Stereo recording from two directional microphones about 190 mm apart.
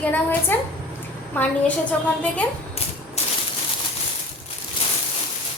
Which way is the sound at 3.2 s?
35° left (ahead or behind).